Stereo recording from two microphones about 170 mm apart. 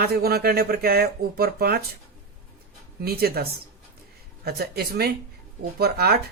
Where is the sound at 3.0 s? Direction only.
65° right (ahead or behind).